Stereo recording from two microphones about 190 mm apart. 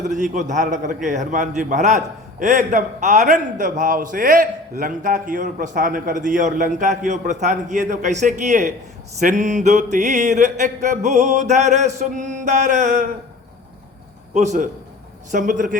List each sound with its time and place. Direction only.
0.1 s a man's voice: 40° right (ahead or behind)
14.3 s a man's voice: 40° right (ahead or behind)